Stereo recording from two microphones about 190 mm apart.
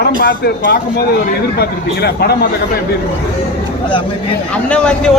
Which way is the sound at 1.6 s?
55° left (ahead or behind).